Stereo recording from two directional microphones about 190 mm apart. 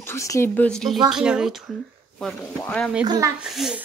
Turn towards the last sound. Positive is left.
turn(degrees=0)  # may be behind; listen again after turning